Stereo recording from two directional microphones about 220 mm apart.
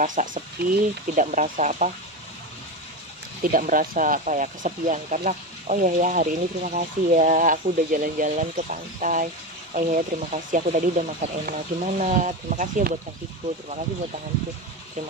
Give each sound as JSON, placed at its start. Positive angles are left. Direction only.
{"t": 0.0, "sound": "speech", "side_deg": -35}
{"t": 3.5, "sound": "speech", "side_deg": -40}